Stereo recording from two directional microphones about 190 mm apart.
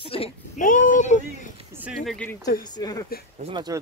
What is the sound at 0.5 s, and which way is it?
Speech, 45° left (ahead or behind).